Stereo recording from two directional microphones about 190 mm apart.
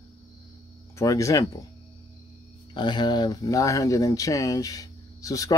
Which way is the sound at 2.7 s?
25° left (ahead or behind).